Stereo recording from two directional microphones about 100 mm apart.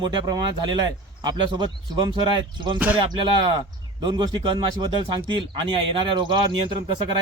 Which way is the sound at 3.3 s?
50° right (ahead or behind).